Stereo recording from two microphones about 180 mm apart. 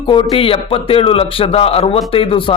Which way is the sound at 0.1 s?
30° left (ahead or behind).